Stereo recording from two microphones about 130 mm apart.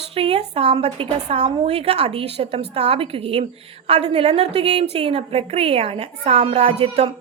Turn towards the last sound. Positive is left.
turn(degrees=-50)  # may be behind; listen again after turning